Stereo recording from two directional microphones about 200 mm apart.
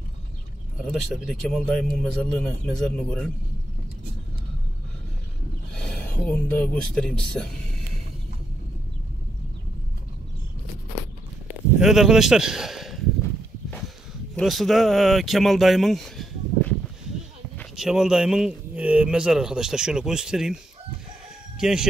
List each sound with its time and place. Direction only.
0.8 s speech: centre (ahead or behind)
5.8 s speech: 5° left (ahead or behind)
11.8 s a man's voice: centre (ahead or behind)
14.3 s speech: centre (ahead or behind)
21.5 s speech: 5° right (ahead or behind)